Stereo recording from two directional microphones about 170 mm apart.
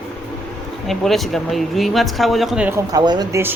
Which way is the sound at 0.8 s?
Centre (ahead or behind).